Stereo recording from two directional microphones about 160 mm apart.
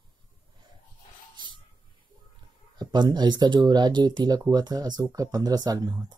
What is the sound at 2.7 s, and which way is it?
Speech, 25° right (ahead or behind).